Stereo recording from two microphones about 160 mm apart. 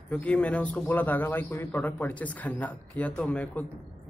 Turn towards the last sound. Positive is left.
turn(degrees=10)  # may be behind; listen again after turning